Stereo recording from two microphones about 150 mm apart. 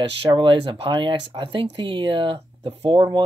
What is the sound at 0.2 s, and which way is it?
Speech, 35° right (ahead or behind).